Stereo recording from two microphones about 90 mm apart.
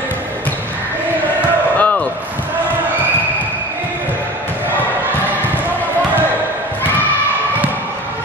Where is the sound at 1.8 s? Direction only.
15° left (ahead or behind).